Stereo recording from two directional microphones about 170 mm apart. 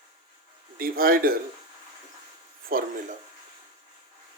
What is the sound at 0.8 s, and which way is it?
Speech, 60° right (ahead or behind).